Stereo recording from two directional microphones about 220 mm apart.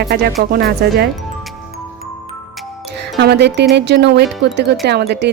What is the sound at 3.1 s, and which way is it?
Speech, 50° right (ahead or behind).